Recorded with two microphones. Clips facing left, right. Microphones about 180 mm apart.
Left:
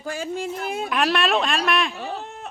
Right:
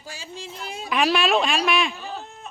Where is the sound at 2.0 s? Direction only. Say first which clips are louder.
Left 4 dB; 70° left (ahead or behind).